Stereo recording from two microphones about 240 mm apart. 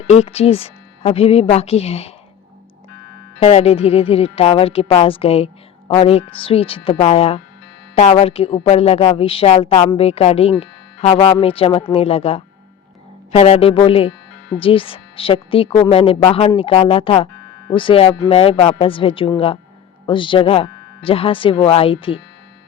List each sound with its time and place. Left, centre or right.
0.1 s speech: left
3.4 s speech: left